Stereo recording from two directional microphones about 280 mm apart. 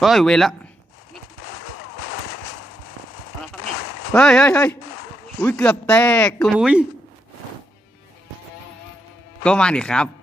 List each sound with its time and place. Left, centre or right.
0.0 s speech: centre
4.1 s speech: centre
9.4 s speech: centre